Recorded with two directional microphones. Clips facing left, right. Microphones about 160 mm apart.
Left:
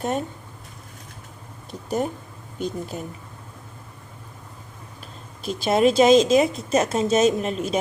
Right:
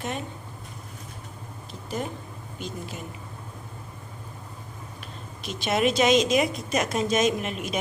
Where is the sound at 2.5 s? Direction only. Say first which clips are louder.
Left 7 dB; 40° left (ahead or behind).